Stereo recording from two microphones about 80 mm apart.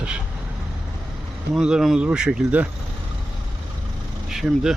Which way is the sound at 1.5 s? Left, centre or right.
Centre.